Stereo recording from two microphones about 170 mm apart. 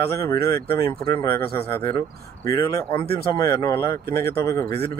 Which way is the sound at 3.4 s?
15° left (ahead or behind).